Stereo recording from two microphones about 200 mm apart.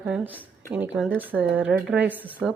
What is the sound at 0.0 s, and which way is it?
Speech, 5° right (ahead or behind).